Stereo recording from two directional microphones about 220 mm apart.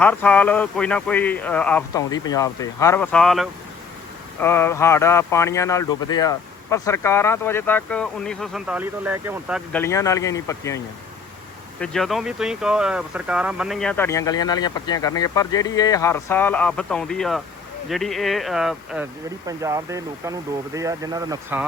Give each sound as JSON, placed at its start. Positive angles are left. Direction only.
{"t": 0.0, "sound": "speech", "side_deg": 5}
{"t": 9.7, "sound": "speech", "side_deg": 10}
{"t": 11.8, "sound": "speech", "side_deg": 0}
{"t": 19.5, "sound": "speech", "side_deg": -15}